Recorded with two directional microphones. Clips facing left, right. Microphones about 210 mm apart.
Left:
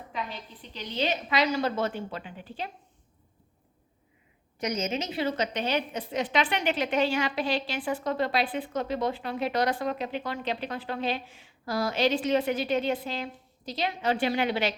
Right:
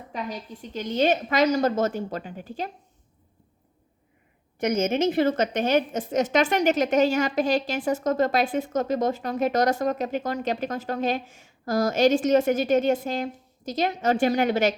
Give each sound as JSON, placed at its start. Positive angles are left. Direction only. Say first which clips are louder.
{"t": 0.1, "sound": "a woman's voice", "louder": "right 4 dB", "side_deg": -45}
{"t": 4.6, "sound": "a woman's voice", "louder": "right 8 dB", "side_deg": -50}